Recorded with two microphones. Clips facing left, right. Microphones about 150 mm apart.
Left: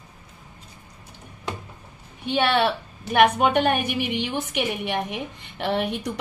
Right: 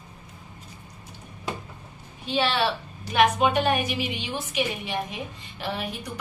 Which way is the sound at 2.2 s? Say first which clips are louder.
Left 3 dB; 60° left (ahead or behind).